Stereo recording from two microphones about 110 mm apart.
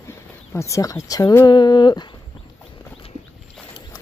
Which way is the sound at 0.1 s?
25° left (ahead or behind).